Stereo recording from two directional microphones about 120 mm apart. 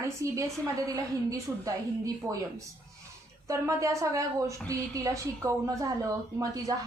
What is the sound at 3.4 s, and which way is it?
A woman's voice, 25° right (ahead or behind).